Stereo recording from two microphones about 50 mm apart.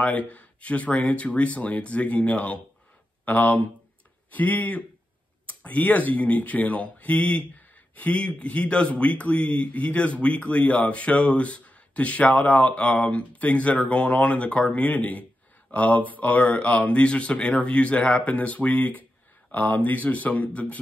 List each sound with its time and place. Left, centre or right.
0.0 s speech: left